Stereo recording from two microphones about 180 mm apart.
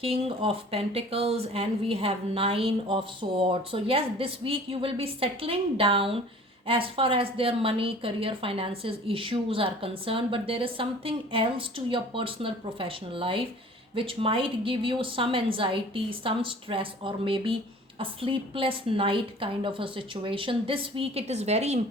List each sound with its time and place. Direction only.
0.0 s a woman's voice: 30° right (ahead or behind)